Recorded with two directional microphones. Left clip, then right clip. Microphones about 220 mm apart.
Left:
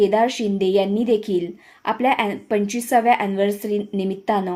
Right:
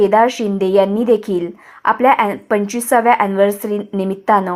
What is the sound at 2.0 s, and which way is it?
A woman's voice, 10° right (ahead or behind).